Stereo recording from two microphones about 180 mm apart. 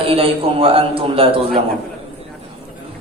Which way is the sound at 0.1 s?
30° right (ahead or behind).